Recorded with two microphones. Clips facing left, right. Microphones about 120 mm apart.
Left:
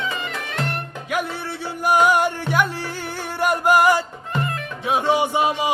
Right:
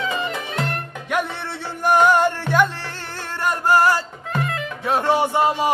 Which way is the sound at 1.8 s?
10° left (ahead or behind).